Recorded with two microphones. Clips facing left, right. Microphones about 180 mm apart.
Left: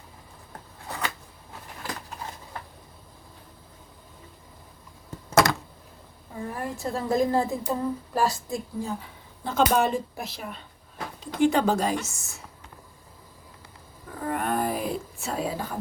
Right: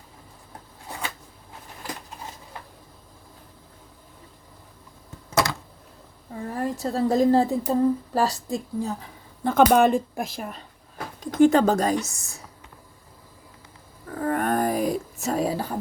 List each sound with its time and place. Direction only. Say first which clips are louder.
6.5 s speech: right 4 dB; 35° right (ahead or behind)
9.4 s speech: right 5 dB; 55° right (ahead or behind); by 12.4 s 35° right (ahead or behind)
14.2 s a sound: right 4 dB; 50° right (ahead or behind)
15.2 s speech: right 6 dB; 40° right (ahead or behind)